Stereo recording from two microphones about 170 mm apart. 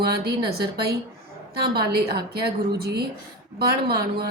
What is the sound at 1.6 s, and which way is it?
A woman's voice, 65° right (ahead or behind).